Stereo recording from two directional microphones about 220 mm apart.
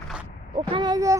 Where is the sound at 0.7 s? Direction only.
20° right (ahead or behind).